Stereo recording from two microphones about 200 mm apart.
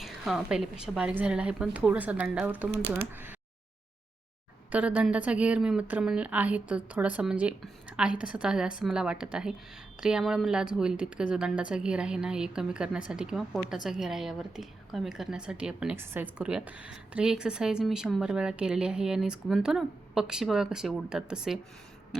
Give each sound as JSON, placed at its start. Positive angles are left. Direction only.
{"t": 0.0, "sound": "a woman's voice", "side_deg": 0}
{"t": 4.7, "sound": "a woman's voice", "side_deg": -5}